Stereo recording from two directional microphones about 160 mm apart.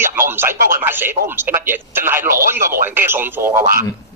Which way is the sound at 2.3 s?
65° right (ahead or behind).